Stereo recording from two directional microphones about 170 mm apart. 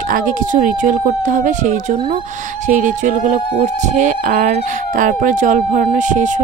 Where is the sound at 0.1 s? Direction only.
50° right (ahead or behind).